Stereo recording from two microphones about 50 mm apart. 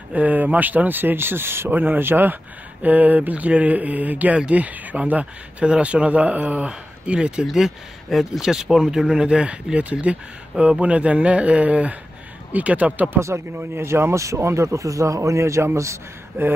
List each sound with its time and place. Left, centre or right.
0.1 s speech: right
2.8 s speech: right
6.7 s speech: centre
7.4 s speech: centre; by 13.1 s right
13.6 s speech: right
16.4 s a sound: right